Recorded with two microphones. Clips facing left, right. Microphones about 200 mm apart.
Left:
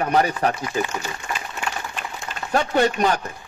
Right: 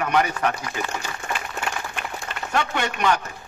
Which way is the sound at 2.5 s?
35° left (ahead or behind).